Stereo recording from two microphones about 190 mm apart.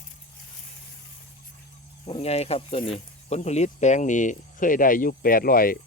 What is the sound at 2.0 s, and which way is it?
Speech, 30° left (ahead or behind).